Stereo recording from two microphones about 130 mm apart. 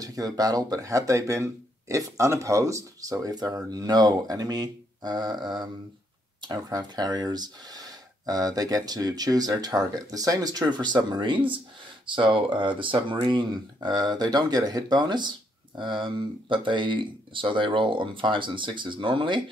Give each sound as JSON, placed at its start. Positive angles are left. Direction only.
{"t": 0.0, "sound": "speech", "side_deg": -30}